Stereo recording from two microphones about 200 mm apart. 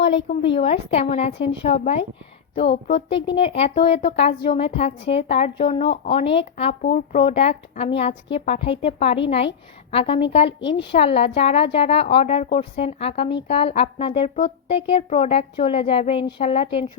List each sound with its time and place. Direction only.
0.4 s a woman's voice: 30° left (ahead or behind)
14.3 s speech: 40° left (ahead or behind)
14.8 s speech: 30° left (ahead or behind)